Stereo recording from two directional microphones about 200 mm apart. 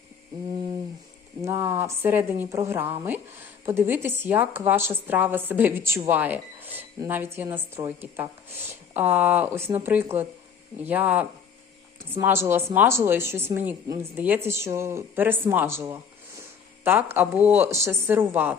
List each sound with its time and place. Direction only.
1.4 s a woman's voice: 15° right (ahead or behind)